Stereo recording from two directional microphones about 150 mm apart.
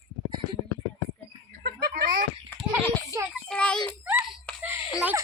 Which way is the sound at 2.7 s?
15° right (ahead or behind).